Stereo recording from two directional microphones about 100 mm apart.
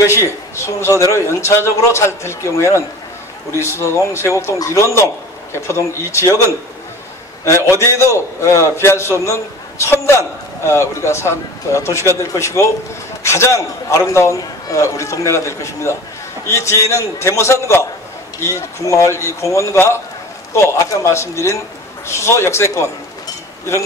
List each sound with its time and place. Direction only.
0.6 s a man's voice: 30° left (ahead or behind)
7.7 s a man's voice: 30° left (ahead or behind)